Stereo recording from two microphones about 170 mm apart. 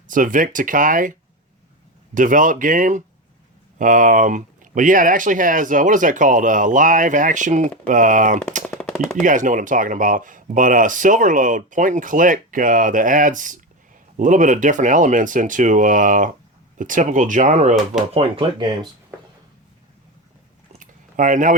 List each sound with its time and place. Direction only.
0.1 s speech: 50° right (ahead or behind)
2.1 s speech: 50° right (ahead or behind)
8.8 s chopping: 5° left (ahead or behind)
9.2 s speech: 50° right (ahead or behind)
18.1 s speech: 35° right (ahead or behind)
20.7 s a sound: 50° right (ahead or behind)